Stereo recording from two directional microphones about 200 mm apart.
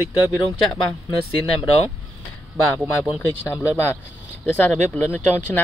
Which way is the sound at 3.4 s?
15° left (ahead or behind).